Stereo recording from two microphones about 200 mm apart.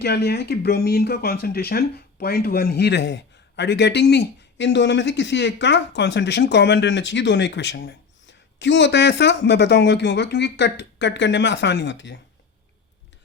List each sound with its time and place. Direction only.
0.0 s speech: 55° left (ahead or behind)